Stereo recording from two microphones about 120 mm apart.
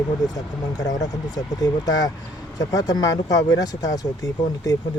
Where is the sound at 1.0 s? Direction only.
30° left (ahead or behind).